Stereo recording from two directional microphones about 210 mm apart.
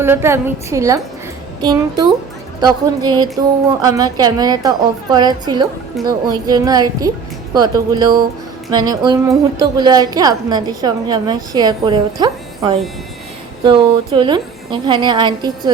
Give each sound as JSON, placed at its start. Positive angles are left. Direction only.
{"t": 0.0, "sound": "a woman's voice", "side_deg": -10}